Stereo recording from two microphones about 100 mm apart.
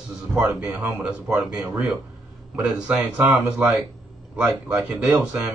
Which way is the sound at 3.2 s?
25° right (ahead or behind).